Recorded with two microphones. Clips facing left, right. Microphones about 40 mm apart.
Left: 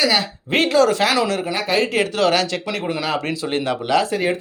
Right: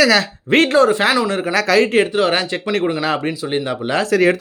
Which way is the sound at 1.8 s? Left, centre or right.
Right.